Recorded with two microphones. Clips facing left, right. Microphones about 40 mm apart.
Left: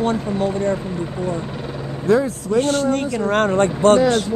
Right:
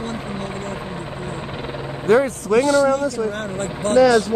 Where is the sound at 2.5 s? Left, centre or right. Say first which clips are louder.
Right 2 dB; right.